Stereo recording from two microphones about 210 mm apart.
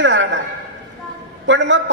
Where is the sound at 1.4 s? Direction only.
60° right (ahead or behind).